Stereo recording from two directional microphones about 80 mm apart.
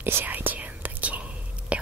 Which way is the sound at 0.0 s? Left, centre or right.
Right.